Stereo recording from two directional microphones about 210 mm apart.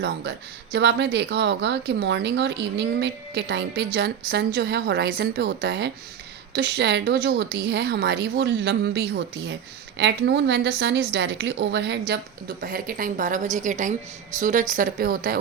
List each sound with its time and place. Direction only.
0.0 s a woman's voice: 55° right (ahead or behind)